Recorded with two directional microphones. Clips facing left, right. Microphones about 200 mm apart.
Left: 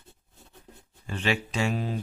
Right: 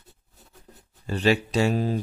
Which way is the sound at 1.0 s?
35° right (ahead or behind).